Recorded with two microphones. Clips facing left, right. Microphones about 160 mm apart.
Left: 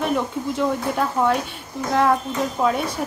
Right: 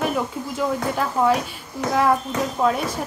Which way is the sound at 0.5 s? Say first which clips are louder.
Even; centre (ahead or behind).